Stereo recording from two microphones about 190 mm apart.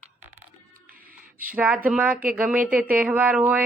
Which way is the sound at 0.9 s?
50° right (ahead or behind).